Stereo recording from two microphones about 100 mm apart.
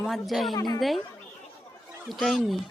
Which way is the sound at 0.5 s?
40° left (ahead or behind).